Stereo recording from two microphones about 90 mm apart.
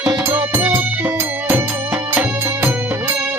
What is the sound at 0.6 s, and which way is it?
Music, 20° right (ahead or behind).